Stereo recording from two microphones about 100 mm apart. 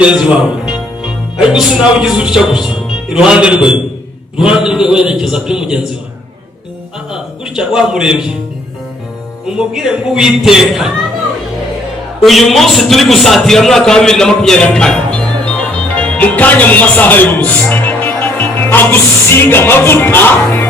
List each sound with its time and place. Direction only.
0.0 s music: 10° right (ahead or behind)
1.5 s a man's voice: 5° right (ahead or behind)
7.1 s a sound: 5° right (ahead or behind)
9.6 s a man's voice: 5° right (ahead or behind)
12.2 s a man's voice: centre (ahead or behind); by 20.7 s 20° left (ahead or behind)